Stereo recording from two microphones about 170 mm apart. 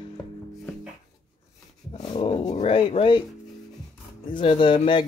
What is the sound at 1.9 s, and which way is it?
Dog, 25° left (ahead or behind).